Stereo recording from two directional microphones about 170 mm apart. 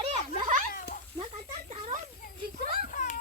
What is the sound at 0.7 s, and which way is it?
Cat, 55° left (ahead or behind).